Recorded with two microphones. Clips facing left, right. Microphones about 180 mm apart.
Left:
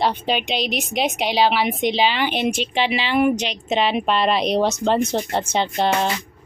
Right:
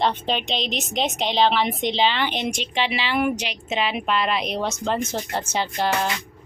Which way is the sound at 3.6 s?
30° left (ahead or behind).